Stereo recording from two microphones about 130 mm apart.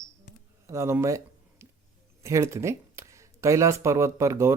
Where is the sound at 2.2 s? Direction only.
25° right (ahead or behind).